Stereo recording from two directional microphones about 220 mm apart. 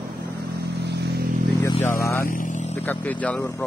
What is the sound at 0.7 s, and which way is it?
Vehicle, 50° right (ahead or behind).